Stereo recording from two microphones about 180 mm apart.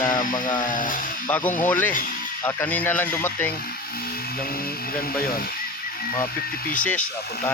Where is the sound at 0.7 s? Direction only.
50° left (ahead or behind).